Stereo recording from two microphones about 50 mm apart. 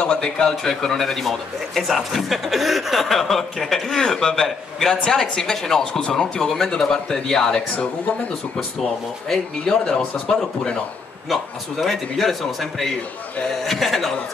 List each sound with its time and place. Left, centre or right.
0.0 s speech: centre
5.9 s speech: centre
6.4 s speech: centre
9.3 s speech: centre
11.8 s speech: centre
13.7 s a sound: centre